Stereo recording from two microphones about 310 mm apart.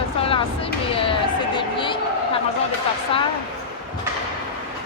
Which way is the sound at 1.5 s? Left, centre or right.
Centre.